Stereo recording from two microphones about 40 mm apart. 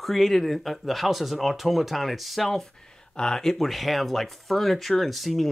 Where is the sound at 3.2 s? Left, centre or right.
Centre.